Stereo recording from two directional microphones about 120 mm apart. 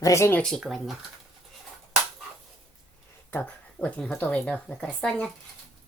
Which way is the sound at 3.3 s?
10° left (ahead or behind).